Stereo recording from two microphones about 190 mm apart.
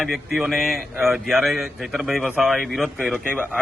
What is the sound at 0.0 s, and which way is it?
A man's voice, centre (ahead or behind).